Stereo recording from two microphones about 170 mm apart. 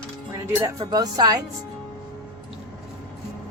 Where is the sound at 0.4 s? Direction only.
20° right (ahead or behind).